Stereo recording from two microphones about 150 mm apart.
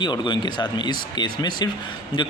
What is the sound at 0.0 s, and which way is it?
Speech, 30° left (ahead or behind).